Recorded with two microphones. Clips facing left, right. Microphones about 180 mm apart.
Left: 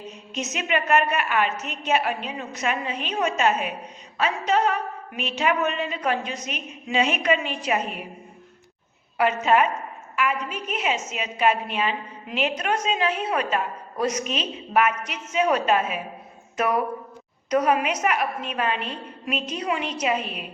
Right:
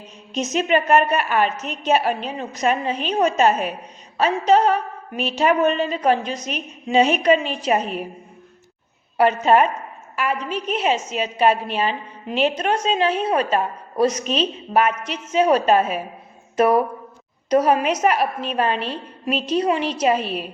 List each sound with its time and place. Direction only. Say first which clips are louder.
0.3 s a woman's voice: right 7 dB; 30° right (ahead or behind)
9.1 s a woman's voice: right 4 dB; 35° right (ahead or behind)